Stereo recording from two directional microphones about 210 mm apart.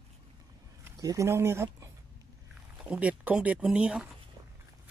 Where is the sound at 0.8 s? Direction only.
15° right (ahead or behind).